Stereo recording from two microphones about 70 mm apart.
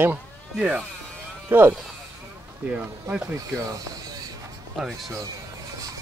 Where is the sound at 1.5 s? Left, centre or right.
Right.